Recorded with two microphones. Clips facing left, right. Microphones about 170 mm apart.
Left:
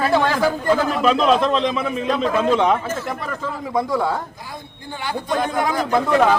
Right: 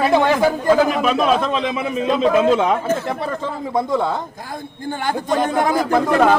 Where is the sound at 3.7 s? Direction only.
20° right (ahead or behind).